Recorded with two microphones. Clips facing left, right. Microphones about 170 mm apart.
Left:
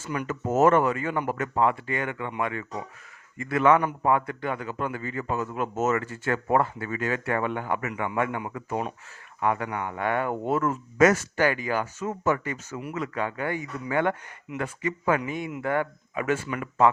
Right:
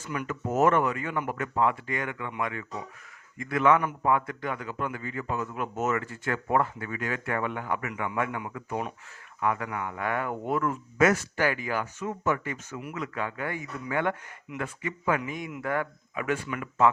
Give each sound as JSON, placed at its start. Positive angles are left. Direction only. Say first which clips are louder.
{"t": 0.1, "sound": "speech", "louder": "left 3 dB", "side_deg": 30}
{"t": 10.6, "sound": "speech", "louder": "left 4 dB", "side_deg": 40}
{"t": 11.3, "sound": "speech", "louder": "left 3 dB", "side_deg": 30}